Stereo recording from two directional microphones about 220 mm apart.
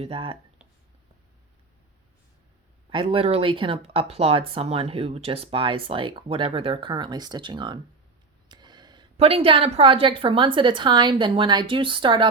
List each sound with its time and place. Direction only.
0.0 s speech: 25° right (ahead or behind)
2.9 s speech: 25° right (ahead or behind)